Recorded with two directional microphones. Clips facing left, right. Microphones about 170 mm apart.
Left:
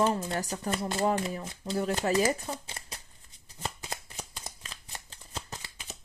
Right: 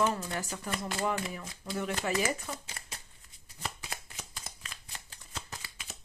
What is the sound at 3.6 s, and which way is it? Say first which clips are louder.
Shuffling cards: left 3 dB; 30° left (ahead or behind).